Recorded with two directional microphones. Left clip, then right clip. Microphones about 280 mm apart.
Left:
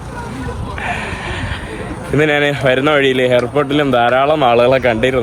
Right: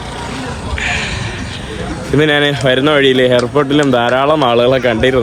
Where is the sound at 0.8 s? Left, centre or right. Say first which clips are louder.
Right 4 dB; centre.